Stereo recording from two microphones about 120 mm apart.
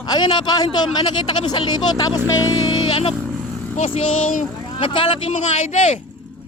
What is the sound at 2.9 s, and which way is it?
A man's voice, 50° left (ahead or behind).